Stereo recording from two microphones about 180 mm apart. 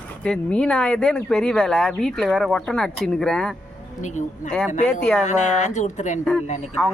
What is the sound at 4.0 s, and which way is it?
Speech, 45° left (ahead or behind).